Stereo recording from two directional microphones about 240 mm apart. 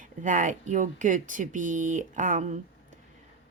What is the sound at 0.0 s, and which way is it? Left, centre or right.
Speech, right.